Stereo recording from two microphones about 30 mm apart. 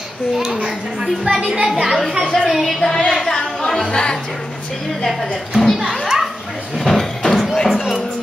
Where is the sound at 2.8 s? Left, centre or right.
Centre.